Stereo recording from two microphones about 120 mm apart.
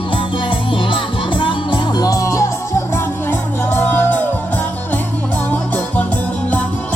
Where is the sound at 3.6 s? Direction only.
15° left (ahead or behind).